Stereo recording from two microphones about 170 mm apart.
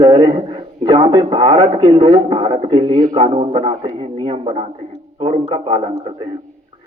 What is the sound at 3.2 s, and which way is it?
Speech, 35° right (ahead or behind).